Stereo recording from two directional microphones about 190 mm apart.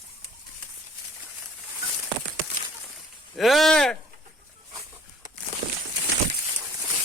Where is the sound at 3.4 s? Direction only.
Centre (ahead or behind).